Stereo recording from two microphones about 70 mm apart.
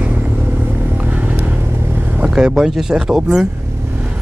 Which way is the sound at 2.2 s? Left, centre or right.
Centre.